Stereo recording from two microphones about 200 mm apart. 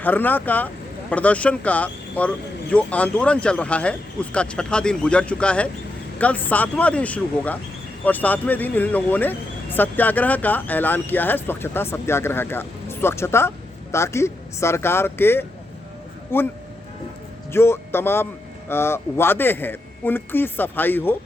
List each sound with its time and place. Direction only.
0.0 s speech: 10° left (ahead or behind)
17.5 s speech: 10° left (ahead or behind)